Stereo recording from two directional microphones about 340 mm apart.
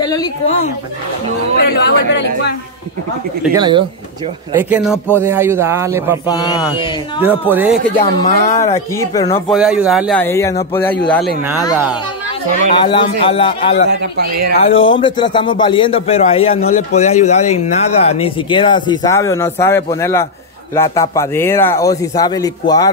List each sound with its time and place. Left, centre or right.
0.0 s a sound: centre
1.6 s speech: left
3.5 s speech: centre
5.2 s speech: centre
6.2 s speech: centre
7.2 s speech: centre
8.0 s speech: centre
9.5 s speech: centre
12.7 s speech: centre
13.8 s a man's voice: right
14.6 s speech: centre